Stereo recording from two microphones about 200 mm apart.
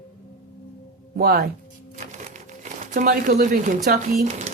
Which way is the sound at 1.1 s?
50° right (ahead or behind).